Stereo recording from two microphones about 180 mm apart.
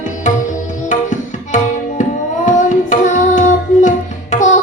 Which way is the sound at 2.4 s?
45° left (ahead or behind).